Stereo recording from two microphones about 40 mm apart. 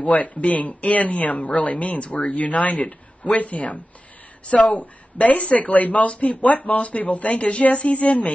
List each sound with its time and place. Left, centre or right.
0.0 s speech: left